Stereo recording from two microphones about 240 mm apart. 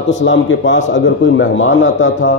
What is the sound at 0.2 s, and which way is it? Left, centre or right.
A man's voice, left.